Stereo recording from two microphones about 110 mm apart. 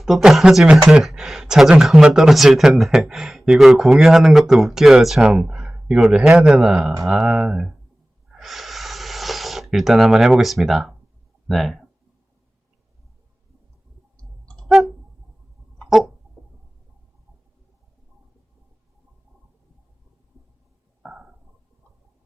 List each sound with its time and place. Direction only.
0.0 s speech: 5° right (ahead or behind)
8.3 s snort: centre (ahead or behind)
11.4 s speech: centre (ahead or behind)
14.2 s clicking: 10° left (ahead or behind)
15.8 s a sound: centre (ahead or behind)
21.0 s a sound: 5° right (ahead or behind)